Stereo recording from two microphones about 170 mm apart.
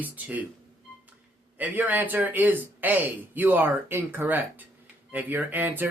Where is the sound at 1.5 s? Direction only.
10° right (ahead or behind).